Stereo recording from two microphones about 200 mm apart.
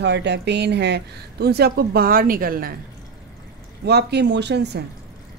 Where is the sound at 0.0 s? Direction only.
60° right (ahead or behind).